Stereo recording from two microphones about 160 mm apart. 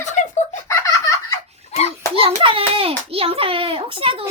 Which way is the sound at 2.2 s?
35° right (ahead or behind).